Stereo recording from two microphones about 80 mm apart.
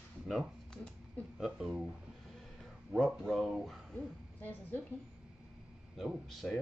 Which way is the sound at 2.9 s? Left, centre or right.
Centre.